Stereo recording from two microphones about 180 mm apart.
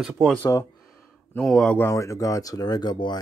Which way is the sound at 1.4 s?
5° left (ahead or behind).